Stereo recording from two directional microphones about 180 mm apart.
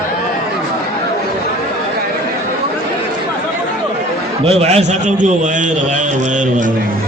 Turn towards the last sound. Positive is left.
turn(degrees=-45)  # may be behind; listen again after turning